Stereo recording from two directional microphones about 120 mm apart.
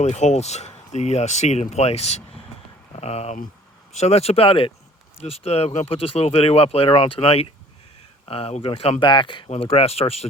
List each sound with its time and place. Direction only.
0.0 s speech: 75° left (ahead or behind); by 4.7 s 50° left (ahead or behind)
5.2 s speech: 60° left (ahead or behind); by 9.5 s 40° left (ahead or behind)
9.5 s speech: 55° left (ahead or behind)